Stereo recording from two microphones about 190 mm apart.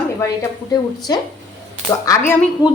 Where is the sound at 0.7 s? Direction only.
20° left (ahead or behind).